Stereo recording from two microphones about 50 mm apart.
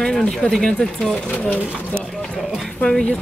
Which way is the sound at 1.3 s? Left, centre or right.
Left.